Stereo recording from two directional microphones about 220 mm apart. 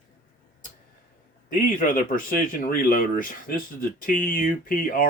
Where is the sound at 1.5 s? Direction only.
40° left (ahead or behind).